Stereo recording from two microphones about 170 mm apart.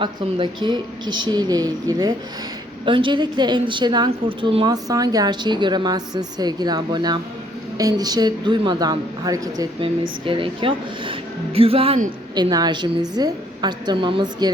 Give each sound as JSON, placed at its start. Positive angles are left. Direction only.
{"t": 0.0, "sound": "a woman's voice", "side_deg": -30}
{"t": 12.3, "sound": "a woman's voice", "side_deg": -25}